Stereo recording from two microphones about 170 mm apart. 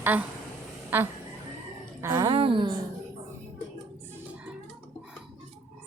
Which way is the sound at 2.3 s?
30° right (ahead or behind).